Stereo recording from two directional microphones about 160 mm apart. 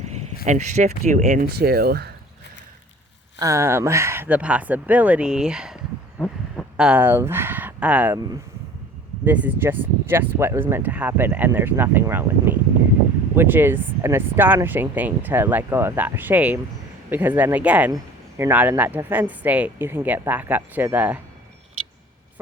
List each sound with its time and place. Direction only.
0.4 s speech: 45° right (ahead or behind)
1.5 s speech: 75° right (ahead or behind)
3.3 s speech: 20° right (ahead or behind)
6.1 s a sound: 10° left (ahead or behind)
6.7 s speech: 5° right (ahead or behind)
9.2 s speech: 10° right (ahead or behind)